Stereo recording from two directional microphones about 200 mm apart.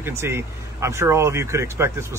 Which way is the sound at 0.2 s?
15° right (ahead or behind).